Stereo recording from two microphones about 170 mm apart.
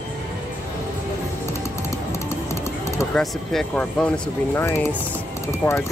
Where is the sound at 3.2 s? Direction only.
5° left (ahead or behind).